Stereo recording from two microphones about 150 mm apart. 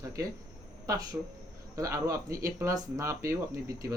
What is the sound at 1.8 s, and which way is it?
Speech, 20° right (ahead or behind).